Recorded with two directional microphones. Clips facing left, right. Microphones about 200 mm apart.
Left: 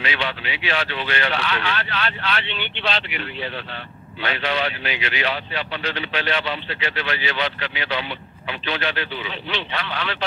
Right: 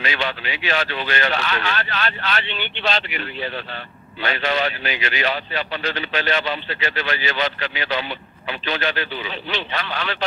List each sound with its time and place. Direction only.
0.0 s speech: 45° right (ahead or behind)